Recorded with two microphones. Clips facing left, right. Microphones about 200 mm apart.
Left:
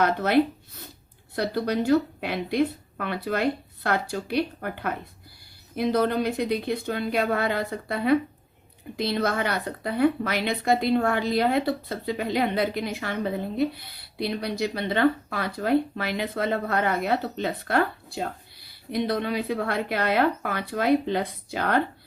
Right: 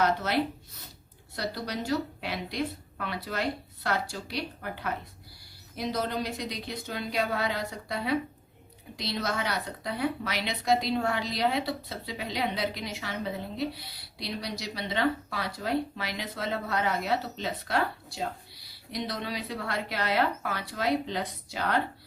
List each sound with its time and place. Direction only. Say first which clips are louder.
0.0 s a woman's voice: left 6 dB; 55° left (ahead or behind)